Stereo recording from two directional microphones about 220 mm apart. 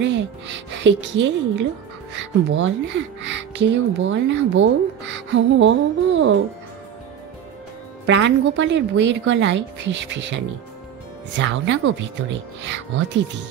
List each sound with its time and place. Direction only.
0.0 s a woman's voice: 55° right (ahead or behind)
3.2 s music: 55° right (ahead or behind)
4.1 s a woman's voice: 55° right (ahead or behind)
8.1 s a woman's voice: 55° right (ahead or behind)